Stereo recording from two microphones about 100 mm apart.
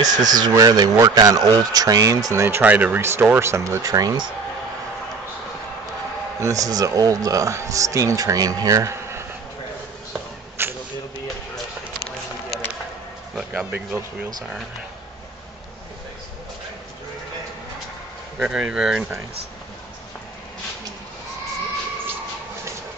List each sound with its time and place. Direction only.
0.0 s speech: 40° right (ahead or behind)
6.4 s speech: 35° right (ahead or behind)
10.6 s a sound: 25° right (ahead or behind)
13.4 s speech: 10° right (ahead or behind)
18.4 s speech: 5° right (ahead or behind)